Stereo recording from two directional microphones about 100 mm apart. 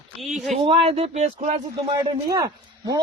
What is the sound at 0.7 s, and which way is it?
Speech, 65° right (ahead or behind).